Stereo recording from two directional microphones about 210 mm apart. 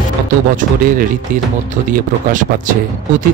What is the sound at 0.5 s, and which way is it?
Speech, 40° right (ahead or behind).